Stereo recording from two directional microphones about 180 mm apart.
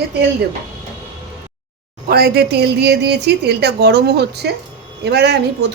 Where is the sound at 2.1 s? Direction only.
65° right (ahead or behind).